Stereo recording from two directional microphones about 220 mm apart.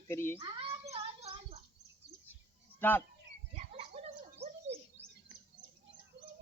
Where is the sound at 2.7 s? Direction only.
10° left (ahead or behind).